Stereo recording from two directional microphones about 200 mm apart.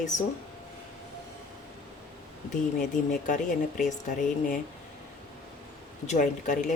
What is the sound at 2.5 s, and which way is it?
Speech, 40° left (ahead or behind).